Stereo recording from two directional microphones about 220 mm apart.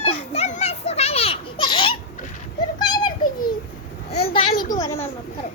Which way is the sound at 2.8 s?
20° left (ahead or behind).